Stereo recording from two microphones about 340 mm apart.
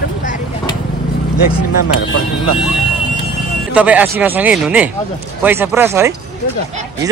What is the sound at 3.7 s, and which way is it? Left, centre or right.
Speech, centre.